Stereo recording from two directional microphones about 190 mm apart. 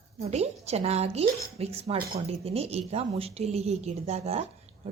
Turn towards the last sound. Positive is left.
turn(degrees=-35)  # may be behind; listen again after turning